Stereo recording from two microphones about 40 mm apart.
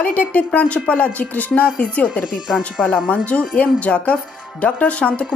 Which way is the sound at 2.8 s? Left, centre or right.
Centre.